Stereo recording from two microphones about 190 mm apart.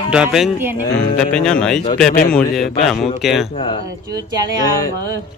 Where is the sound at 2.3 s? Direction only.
Centre (ahead or behind).